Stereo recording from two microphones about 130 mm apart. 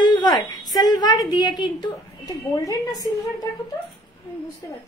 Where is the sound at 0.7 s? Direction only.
30° left (ahead or behind).